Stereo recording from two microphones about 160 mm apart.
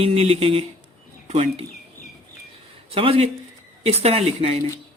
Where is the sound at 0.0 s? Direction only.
35° right (ahead or behind).